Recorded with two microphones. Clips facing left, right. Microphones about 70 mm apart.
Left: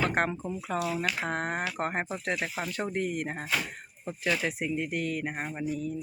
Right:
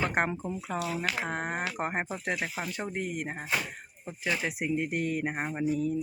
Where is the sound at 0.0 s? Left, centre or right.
Centre.